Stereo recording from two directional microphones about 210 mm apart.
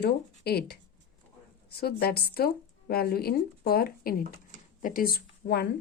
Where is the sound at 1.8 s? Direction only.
45° left (ahead or behind).